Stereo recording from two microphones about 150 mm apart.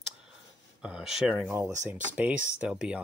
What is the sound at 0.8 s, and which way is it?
Speech, 5° right (ahead or behind).